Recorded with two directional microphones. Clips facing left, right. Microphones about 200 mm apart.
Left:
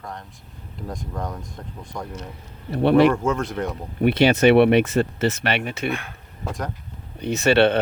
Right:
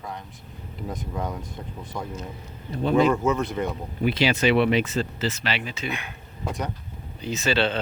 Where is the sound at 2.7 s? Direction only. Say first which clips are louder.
Left 5 dB; 70° left (ahead or behind).